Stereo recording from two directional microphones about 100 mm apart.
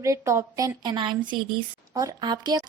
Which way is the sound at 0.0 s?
30° right (ahead or behind).